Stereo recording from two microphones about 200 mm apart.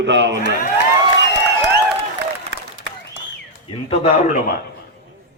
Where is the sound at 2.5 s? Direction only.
65° right (ahead or behind).